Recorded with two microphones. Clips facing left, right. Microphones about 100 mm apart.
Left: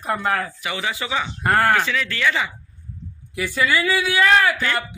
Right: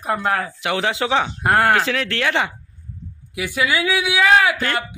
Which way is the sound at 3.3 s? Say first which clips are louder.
Even; 10° right (ahead or behind).